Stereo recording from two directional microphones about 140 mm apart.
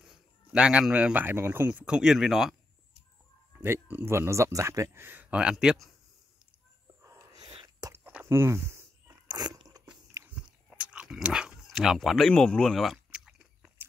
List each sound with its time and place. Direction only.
0.0 s speech: 5° right (ahead or behind)
3.5 s speech: 15° right (ahead or behind)
7.0 s a sound: 25° right (ahead or behind)
8.0 s a sound: 15° right (ahead or behind)
9.3 s biting: 30° right (ahead or behind)
10.2 s dog: 10° right (ahead or behind)